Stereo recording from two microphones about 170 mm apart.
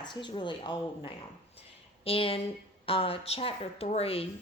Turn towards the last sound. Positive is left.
turn(degrees=35)  # may be behind; listen again after turning